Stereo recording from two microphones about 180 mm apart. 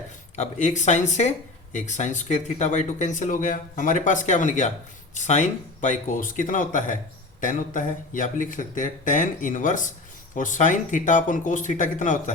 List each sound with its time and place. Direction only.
0.3 s speech: 40° left (ahead or behind)